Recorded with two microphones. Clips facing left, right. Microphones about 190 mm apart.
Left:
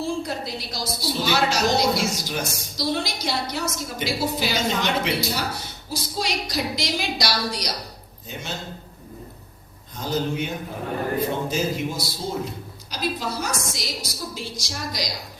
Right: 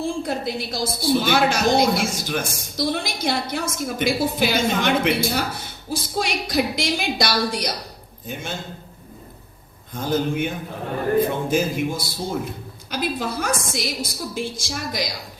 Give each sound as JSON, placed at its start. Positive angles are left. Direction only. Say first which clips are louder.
{"t": 0.0, "sound": "a woman's voice", "louder": "right 3 dB", "side_deg": -55}
{"t": 9.9, "sound": "a woman's voice", "louder": "right 3 dB", "side_deg": -55}